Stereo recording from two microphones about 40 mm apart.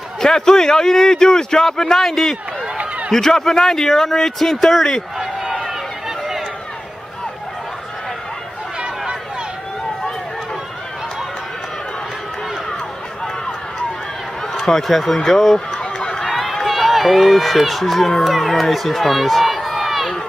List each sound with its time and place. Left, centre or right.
0.2 s speech: centre
6.0 s run: centre
14.7 s speech: centre
15.8 s run: centre
16.2 s speech: centre